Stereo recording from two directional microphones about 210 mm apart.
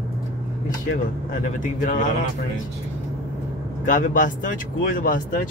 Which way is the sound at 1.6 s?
35° left (ahead or behind).